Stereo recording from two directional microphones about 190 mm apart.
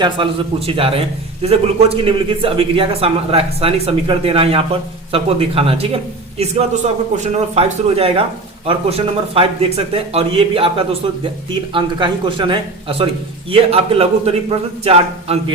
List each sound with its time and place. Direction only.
0.2 s a man's voice: 25° right (ahead or behind)